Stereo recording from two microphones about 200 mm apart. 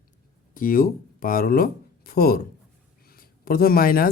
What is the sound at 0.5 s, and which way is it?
Speech, 45° left (ahead or behind).